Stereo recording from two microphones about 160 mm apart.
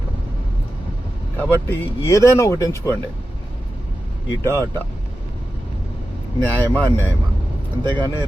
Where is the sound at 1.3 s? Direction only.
15° left (ahead or behind).